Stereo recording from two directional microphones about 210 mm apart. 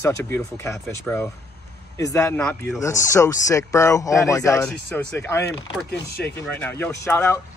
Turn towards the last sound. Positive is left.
turn(degrees=10)  # may be behind; listen again after turning